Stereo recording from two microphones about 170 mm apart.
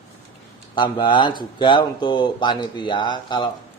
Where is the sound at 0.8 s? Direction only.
25° left (ahead or behind).